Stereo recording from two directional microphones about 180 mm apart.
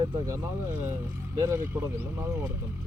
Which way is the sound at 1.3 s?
15° right (ahead or behind).